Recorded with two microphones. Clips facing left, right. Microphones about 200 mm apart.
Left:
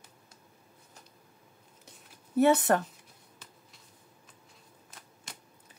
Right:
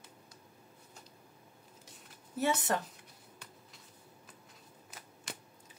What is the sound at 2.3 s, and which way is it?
Speech, 60° left (ahead or behind).